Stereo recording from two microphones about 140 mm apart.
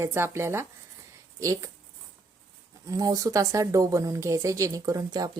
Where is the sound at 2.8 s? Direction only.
25° right (ahead or behind).